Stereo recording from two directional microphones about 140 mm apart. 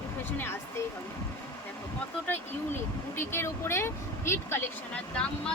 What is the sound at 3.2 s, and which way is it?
Speech, 15° left (ahead or behind).